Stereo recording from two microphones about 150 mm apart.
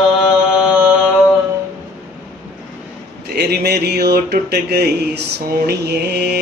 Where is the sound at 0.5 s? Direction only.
5° right (ahead or behind).